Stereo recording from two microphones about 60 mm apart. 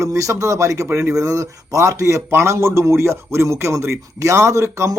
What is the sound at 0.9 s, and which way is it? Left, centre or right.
Speech, right.